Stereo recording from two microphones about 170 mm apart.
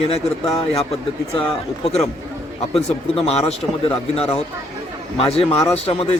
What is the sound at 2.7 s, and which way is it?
A man's voice, 35° left (ahead or behind).